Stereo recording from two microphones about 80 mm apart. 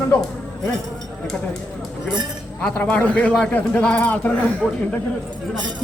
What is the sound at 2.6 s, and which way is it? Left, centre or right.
A man's voice, centre.